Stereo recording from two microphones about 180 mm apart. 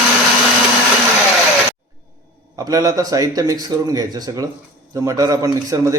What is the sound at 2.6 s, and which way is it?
A man's voice, 20° right (ahead or behind).